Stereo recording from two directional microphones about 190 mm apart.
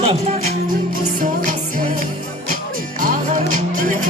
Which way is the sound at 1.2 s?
45° right (ahead or behind).